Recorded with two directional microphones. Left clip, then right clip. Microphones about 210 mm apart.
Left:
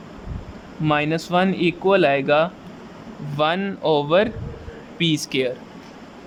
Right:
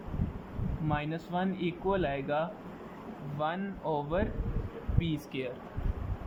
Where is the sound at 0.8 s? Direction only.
45° left (ahead or behind).